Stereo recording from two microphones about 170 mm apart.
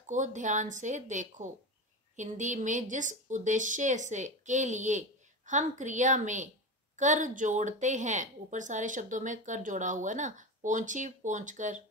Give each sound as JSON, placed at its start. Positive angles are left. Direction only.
{"t": 0.1, "sound": "a woman's voice", "side_deg": -45}